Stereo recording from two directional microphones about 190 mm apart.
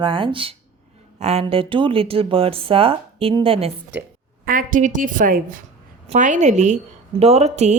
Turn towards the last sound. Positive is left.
turn(degrees=-35)  # may be behind; listen again after turning